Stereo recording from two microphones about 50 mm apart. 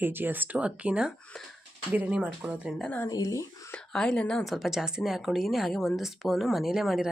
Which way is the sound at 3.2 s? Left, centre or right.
Left.